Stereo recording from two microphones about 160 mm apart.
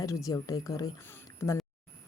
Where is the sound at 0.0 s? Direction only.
20° left (ahead or behind).